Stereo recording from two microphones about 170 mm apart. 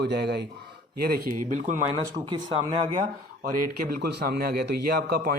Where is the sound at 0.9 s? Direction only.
65° right (ahead or behind).